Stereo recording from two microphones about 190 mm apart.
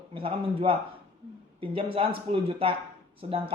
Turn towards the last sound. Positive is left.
turn(degrees=-30)  # may be behind; listen again after turning